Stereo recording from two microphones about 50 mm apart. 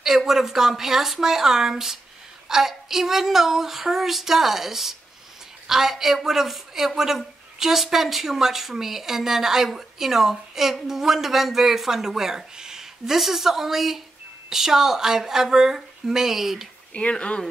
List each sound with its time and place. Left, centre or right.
0.3 s a woman's voice: centre
16.9 s speech: left